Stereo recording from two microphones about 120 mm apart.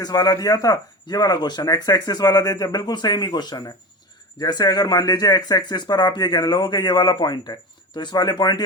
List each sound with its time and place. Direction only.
0.0 s speech: 35° left (ahead or behind)